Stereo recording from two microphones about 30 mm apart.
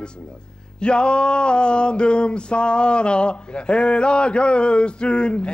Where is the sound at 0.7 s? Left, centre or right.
Left.